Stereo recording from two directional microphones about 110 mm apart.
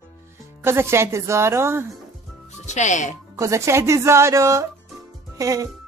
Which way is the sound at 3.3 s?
30° right (ahead or behind).